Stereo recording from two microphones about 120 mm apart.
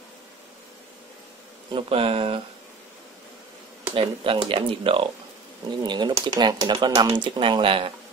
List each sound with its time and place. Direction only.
1.7 s speech: 50° right (ahead or behind)
3.9 s speech: 45° right (ahead or behind)